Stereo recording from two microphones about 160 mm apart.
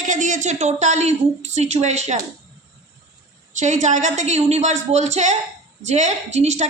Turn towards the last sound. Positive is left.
turn(degrees=-45)  # may be behind; listen again after turning